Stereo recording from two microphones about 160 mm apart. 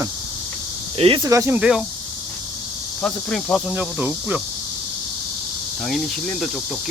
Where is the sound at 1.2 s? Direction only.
20° right (ahead or behind).